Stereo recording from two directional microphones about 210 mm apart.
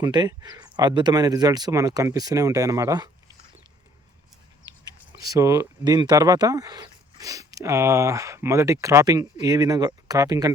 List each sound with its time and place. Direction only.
0.0 s speech: 20° right (ahead or behind)
5.2 s speech: 15° right (ahead or behind)